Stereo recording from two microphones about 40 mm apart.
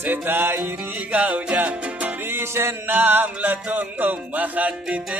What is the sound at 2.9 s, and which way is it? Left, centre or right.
Music, right.